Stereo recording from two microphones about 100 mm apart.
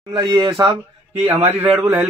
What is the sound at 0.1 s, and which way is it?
Speech, 45° right (ahead or behind).